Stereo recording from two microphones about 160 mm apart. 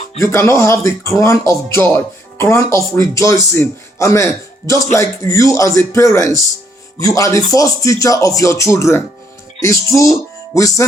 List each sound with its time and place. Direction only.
0.2 s a man's voice: 15° left (ahead or behind)